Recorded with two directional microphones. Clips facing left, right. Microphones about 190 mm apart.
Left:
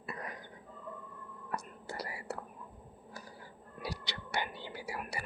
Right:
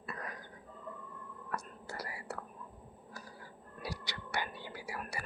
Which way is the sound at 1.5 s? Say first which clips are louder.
Left 1 dB; 25° left (ahead or behind).